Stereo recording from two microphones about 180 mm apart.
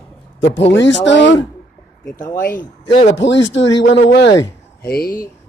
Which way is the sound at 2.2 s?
10° left (ahead or behind).